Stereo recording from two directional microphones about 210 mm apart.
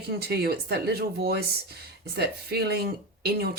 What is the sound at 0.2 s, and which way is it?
Speech, 50° right (ahead or behind).